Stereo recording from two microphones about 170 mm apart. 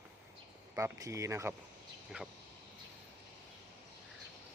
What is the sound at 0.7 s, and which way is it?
Speech, 20° right (ahead or behind).